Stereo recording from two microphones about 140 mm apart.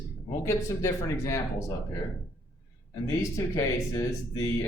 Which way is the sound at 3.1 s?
20° left (ahead or behind).